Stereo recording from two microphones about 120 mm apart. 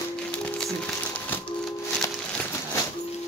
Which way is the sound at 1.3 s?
15° left (ahead or behind).